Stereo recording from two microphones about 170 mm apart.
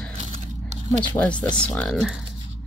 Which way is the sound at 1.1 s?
10° left (ahead or behind).